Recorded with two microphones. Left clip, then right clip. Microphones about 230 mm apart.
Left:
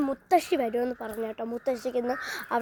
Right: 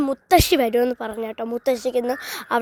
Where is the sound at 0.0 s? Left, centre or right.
Right.